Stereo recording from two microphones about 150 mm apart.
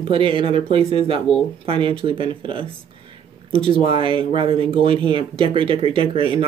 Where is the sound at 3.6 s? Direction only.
35° right (ahead or behind).